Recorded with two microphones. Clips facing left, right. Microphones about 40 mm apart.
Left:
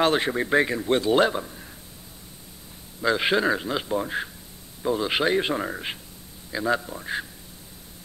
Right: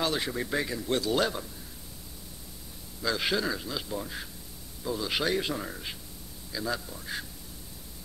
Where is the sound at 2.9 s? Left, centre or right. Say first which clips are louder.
Left 7 dB; left.